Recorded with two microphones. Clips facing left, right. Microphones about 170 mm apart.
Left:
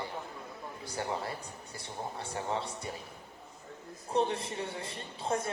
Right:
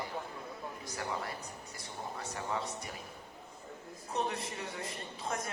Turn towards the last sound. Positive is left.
turn(degrees=30)  # may be behind; listen again after turning